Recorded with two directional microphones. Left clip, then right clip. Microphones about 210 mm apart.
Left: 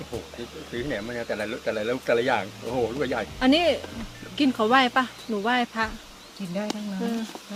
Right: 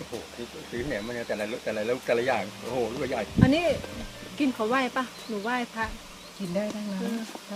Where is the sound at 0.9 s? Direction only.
35° left (ahead or behind).